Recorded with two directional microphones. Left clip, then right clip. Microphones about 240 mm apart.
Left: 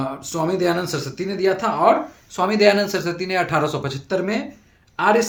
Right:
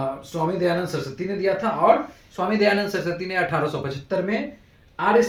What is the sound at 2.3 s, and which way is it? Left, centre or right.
Speech, left.